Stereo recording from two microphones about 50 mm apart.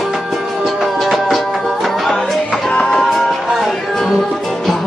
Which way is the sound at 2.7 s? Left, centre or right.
Left.